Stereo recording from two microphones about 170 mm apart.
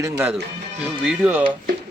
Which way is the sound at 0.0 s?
10° right (ahead or behind).